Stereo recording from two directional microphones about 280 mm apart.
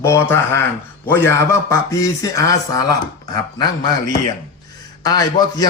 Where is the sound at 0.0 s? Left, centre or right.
Centre.